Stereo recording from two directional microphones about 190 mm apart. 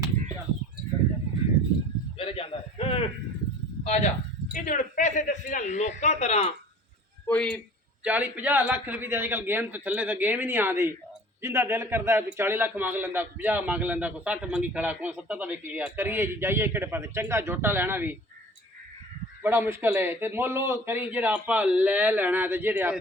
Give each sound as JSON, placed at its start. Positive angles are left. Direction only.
{"t": 2.1, "sound": "a sound", "side_deg": 30}
{"t": 3.8, "sound": "a man's voice", "side_deg": 35}
{"t": 7.3, "sound": "a man's voice", "side_deg": 5}
{"t": 8.0, "sound": "a man's voice", "side_deg": -5}
{"t": 19.4, "sound": "a man's voice", "side_deg": -10}